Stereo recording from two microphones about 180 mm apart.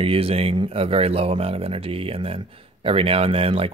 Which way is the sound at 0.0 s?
30° right (ahead or behind).